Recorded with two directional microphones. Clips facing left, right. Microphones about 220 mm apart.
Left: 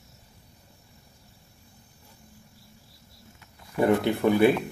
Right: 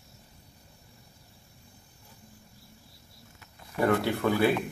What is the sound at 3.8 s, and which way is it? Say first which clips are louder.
Speech: left 3 dB; 20° left (ahead or behind).